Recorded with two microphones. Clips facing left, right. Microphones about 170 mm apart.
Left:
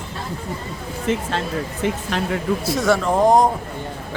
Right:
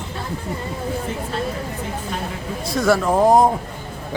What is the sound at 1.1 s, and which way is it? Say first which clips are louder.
Speech: left 3 dB; 90° left.